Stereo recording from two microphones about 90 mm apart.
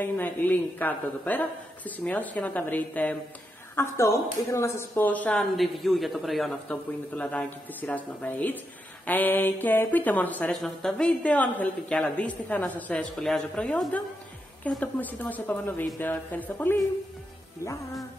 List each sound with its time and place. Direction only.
0.0 s speech: 20° left (ahead or behind)
3.7 s speech: 30° left (ahead or behind)
5.3 s a woman's voice: centre (ahead or behind)
6.7 s speech: 10° left (ahead or behind)
13.1 s a woman's voice: 5° left (ahead or behind); by 16.7 s 20° left (ahead or behind)